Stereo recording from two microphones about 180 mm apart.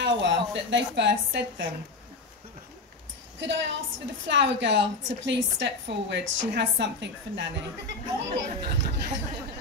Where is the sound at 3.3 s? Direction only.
80° right.